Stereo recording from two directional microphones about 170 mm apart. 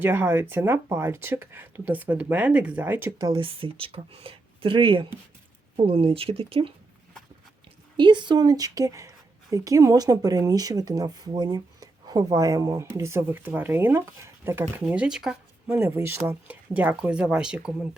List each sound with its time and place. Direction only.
0.0 s speech: 10° right (ahead or behind)
3.2 s speech: 25° right (ahead or behind)
7.9 s a woman's voice: 25° right (ahead or behind); by 17.7 s 5° right (ahead or behind)